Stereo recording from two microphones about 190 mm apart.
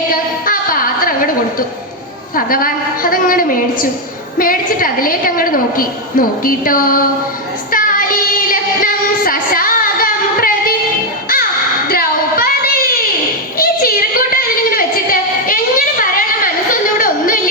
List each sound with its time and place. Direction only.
0.4 s music: 50° left (ahead or behind)
2.3 s a woman's voice: 50° left (ahead or behind)
7.7 s child singing: 45° left (ahead or behind)
8.4 s music: 50° left (ahead or behind)
11.9 s child singing: 50° left (ahead or behind)
13.6 s a sound: 50° left (ahead or behind)